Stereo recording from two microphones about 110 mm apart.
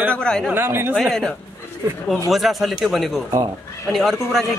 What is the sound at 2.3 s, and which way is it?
Speech, centre (ahead or behind).